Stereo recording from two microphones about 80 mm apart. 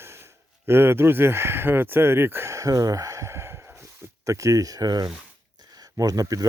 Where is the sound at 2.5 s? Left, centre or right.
Right.